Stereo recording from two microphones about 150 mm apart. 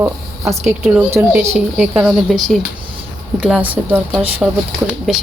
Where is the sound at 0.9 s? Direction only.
10° right (ahead or behind).